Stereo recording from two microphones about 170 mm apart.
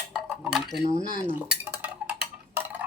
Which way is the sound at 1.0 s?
50° left (ahead or behind).